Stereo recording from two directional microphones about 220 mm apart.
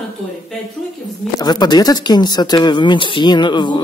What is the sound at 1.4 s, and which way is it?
Speech, 20° left (ahead or behind).